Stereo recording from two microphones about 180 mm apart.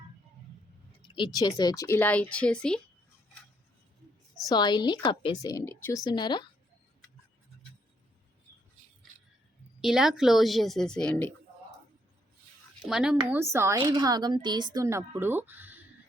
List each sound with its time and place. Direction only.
1.0 s speech: 25° left (ahead or behind); by 2.8 s 5° left (ahead or behind)
4.4 s a woman's voice: 25° left (ahead or behind)
6.1 s a woman's voice: 25° left (ahead or behind)
9.8 s a woman's voice: centre (ahead or behind)
12.9 s a woman's voice: 5° right (ahead or behind)
13.3 s a woman's voice: 15° right (ahead or behind)